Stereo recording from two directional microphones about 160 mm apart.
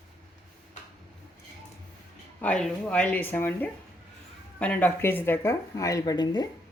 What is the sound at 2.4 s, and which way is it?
Speech, 5° left (ahead or behind).